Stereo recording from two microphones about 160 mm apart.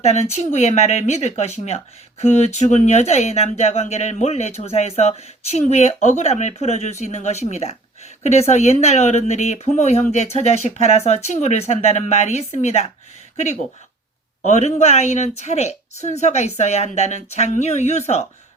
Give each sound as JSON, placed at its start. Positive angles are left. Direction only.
{"t": 0.0, "sound": "speech", "side_deg": 45}
{"t": 14.4, "sound": "speech", "side_deg": 45}